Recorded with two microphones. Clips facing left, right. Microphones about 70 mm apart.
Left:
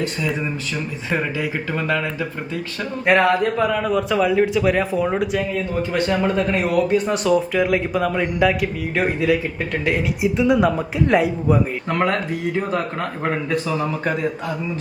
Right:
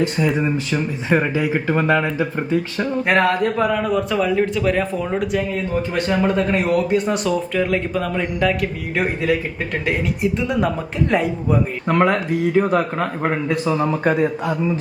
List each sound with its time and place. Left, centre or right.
0.2 s speech: right
1.5 s speech: centre
3.1 s a man's voice: centre
11.9 s a man's voice: centre